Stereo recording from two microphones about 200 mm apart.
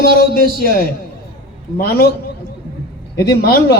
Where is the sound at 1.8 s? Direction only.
50° left (ahead or behind).